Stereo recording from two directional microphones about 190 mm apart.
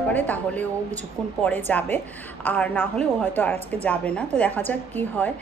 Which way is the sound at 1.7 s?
10° left (ahead or behind).